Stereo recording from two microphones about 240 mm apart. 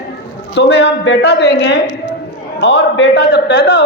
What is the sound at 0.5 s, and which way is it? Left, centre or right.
A man's voice, left.